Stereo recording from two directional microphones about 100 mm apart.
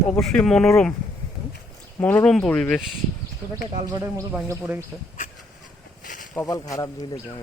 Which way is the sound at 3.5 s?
35° right (ahead or behind).